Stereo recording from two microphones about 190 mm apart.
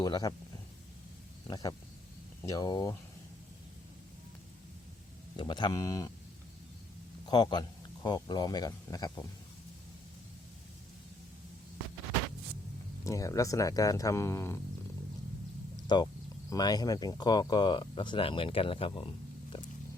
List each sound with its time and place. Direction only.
0.0 s speech: 20° left (ahead or behind)
1.5 s speech: 20° left (ahead or behind)
5.4 s speech: 25° left (ahead or behind)
7.3 s a man's voice: 20° left (ahead or behind)
13.1 s speech: 15° left (ahead or behind)
15.9 s speech: 25° left (ahead or behind)